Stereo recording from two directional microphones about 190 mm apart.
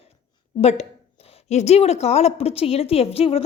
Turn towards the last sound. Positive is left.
turn(degrees=30)  # may be behind; listen again after turning